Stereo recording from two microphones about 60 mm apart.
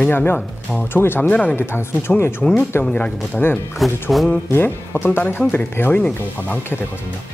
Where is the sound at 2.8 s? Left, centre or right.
Centre.